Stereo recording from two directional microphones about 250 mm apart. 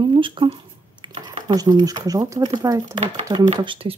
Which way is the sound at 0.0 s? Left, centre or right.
Centre.